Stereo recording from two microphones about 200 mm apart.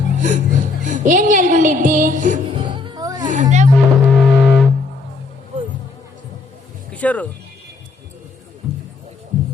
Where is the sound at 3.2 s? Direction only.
40° right (ahead or behind).